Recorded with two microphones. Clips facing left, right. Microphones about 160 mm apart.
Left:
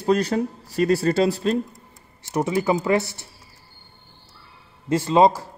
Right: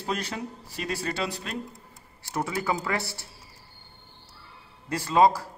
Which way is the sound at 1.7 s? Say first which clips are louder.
Left 1 dB; 20° left (ahead or behind).